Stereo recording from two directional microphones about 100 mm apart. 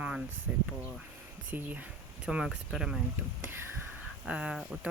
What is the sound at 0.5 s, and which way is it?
Speech, 15° right (ahead or behind).